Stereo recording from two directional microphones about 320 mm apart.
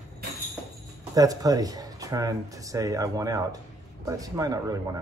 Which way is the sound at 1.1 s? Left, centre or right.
Centre.